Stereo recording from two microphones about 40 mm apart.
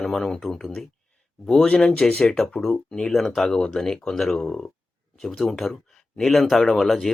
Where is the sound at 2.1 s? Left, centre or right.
Left.